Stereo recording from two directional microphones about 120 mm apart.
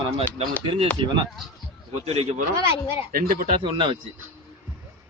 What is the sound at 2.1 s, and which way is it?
Speech, 60° right (ahead or behind).